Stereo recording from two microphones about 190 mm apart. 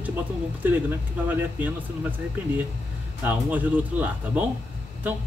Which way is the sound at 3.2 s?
10° right (ahead or behind).